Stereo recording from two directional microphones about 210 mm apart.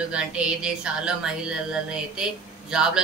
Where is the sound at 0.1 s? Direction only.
5° right (ahead or behind).